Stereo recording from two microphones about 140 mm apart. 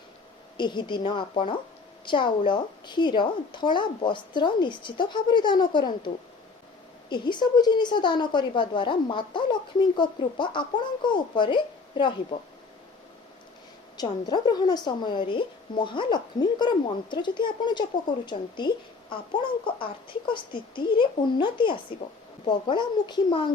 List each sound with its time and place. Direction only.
0.5 s a woman's voice: 35° left (ahead or behind)
7.1 s a woman's voice: 30° left (ahead or behind)
13.9 s a woman's voice: 30° left (ahead or behind)